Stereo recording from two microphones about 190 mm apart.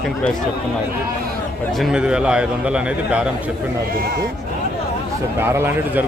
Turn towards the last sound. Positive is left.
turn(degrees=-10)  # may be behind; listen again after turning